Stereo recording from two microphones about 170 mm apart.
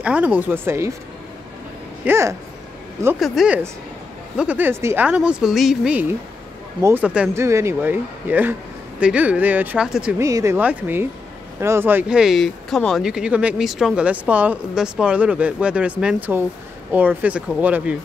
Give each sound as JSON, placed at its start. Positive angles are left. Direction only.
{"t": 0.0, "sound": "speech", "side_deg": -10}
{"t": 2.0, "sound": "speech", "side_deg": -15}
{"t": 3.2, "sound": "speech", "side_deg": 0}
{"t": 10.2, "sound": "speech", "side_deg": -15}